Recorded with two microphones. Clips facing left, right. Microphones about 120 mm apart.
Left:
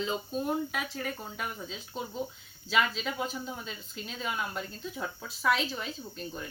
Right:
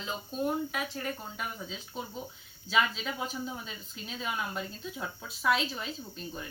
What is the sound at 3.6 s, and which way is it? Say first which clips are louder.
Speech: left 2 dB; 5° right (ahead or behind).